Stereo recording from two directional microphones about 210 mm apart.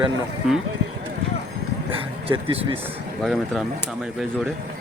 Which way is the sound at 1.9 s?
25° right (ahead or behind).